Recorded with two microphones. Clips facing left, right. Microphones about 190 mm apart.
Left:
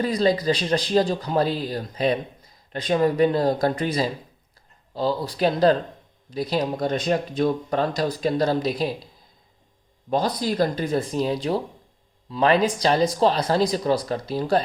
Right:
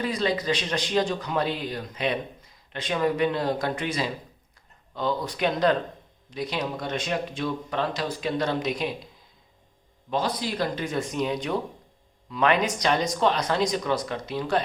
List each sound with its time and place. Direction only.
0.0 s speech: 35° left (ahead or behind)
10.1 s speech: 40° left (ahead or behind)